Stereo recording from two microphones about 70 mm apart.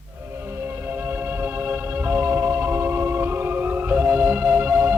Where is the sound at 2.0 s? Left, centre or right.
Right.